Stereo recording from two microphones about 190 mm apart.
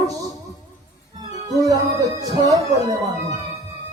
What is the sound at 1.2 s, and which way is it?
Music, 20° right (ahead or behind).